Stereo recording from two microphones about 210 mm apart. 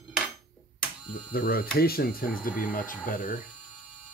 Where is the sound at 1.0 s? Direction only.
45° left (ahead or behind).